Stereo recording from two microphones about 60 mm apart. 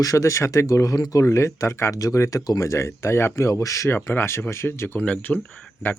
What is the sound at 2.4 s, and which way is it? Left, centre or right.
Speech, left.